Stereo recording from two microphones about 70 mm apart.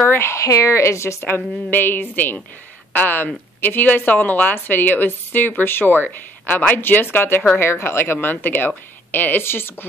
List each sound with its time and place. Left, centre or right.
0.0 s a woman's voice: left